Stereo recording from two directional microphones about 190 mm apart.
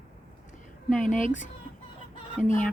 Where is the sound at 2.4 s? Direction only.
45° left (ahead or behind).